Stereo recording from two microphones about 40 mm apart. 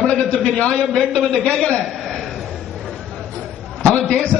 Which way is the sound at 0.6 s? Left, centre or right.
Left.